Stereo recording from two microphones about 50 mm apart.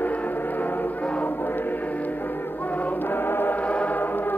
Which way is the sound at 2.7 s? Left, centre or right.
Left.